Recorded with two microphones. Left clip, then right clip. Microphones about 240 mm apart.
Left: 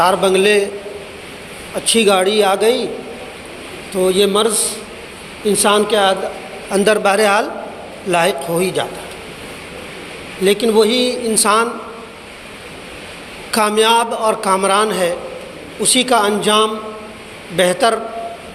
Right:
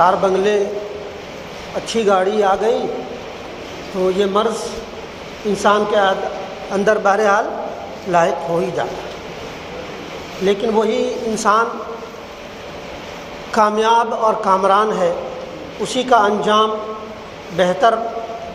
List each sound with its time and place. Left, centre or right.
0.0 s a man's voice: left
1.9 s a man's voice: left
4.0 s a man's voice: left
5.6 s a man's voice: left
10.4 s a man's voice: left
13.5 s a man's voice: left